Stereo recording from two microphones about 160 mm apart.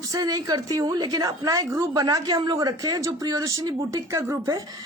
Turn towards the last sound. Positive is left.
turn(degrees=-25)  # may be behind; listen again after turning